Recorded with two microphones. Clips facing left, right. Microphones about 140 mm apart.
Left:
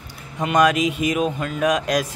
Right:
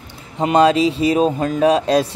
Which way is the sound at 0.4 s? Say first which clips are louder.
Right 4 dB; 30° right (ahead or behind).